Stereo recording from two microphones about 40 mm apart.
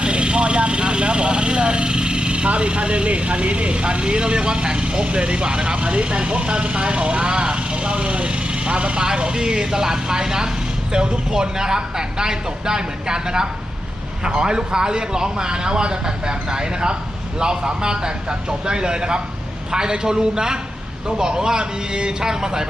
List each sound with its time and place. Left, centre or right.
0.0 s a man's voice: right